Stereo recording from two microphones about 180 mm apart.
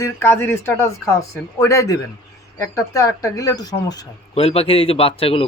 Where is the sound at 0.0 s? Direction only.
10° left (ahead or behind).